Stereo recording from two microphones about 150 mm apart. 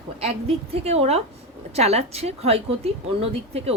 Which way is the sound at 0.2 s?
45° right (ahead or behind).